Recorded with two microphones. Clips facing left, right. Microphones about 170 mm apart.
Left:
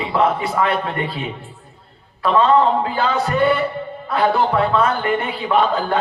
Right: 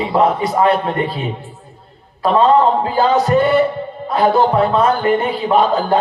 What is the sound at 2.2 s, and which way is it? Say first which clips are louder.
Speech: right 3 dB; 35° right (ahead or behind).